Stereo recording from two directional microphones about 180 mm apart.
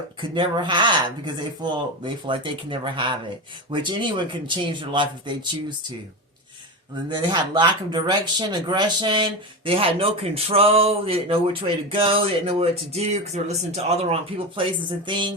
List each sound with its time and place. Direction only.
0.2 s speech: 25° right (ahead or behind)
7.2 s speech: 25° right (ahead or behind)